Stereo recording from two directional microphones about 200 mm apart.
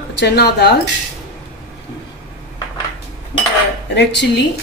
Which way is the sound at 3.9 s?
55° left (ahead or behind).